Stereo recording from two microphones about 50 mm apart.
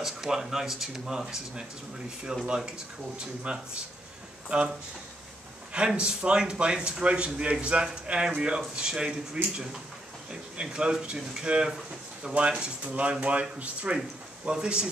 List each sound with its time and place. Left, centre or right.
0.0 s a man's voice: centre
5.9 s a man's voice: centre
13.9 s a man's voice: centre